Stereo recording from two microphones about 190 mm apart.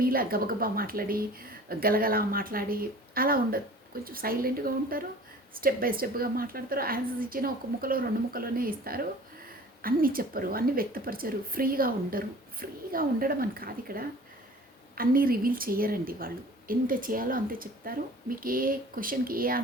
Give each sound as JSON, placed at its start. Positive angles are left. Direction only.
{"t": 0.0, "sound": "speech", "side_deg": -50}